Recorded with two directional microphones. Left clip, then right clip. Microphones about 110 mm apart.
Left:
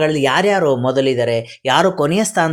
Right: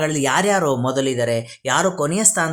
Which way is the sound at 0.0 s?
25° left (ahead or behind).